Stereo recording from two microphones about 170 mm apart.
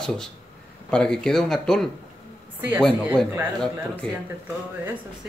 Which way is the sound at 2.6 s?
10° right (ahead or behind).